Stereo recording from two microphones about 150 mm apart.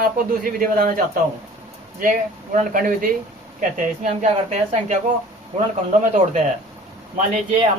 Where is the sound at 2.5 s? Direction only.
65° right (ahead or behind).